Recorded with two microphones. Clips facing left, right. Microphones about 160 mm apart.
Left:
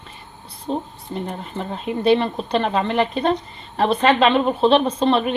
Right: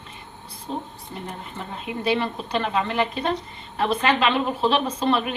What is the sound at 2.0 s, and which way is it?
Speech, 30° left (ahead or behind).